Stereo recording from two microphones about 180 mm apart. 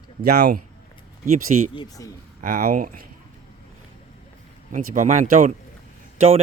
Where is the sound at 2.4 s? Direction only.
55° right (ahead or behind).